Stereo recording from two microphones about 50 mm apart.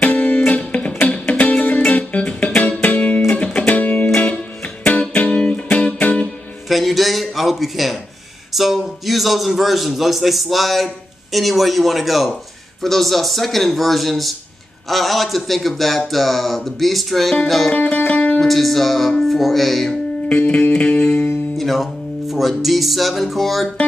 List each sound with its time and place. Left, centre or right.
0.0 s music: left
6.7 s a sound: centre
8.5 s a man's voice: centre
17.7 s music: left
18.4 s a man's voice: centre
20.2 s music: left
21.5 s a man's voice: centre